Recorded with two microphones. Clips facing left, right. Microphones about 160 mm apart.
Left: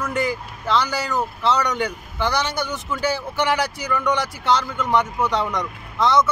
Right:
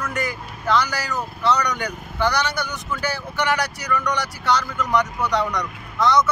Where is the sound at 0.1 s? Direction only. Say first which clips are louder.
Left 4 dB; 25° left (ahead or behind).